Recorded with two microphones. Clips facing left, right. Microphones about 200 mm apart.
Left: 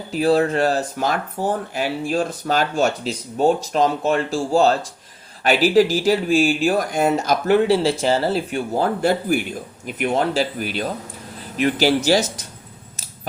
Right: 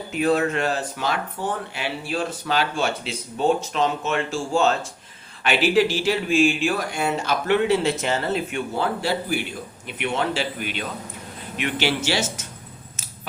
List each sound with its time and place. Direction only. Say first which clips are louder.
0.1 s speech: left 4 dB; 35° left (ahead or behind)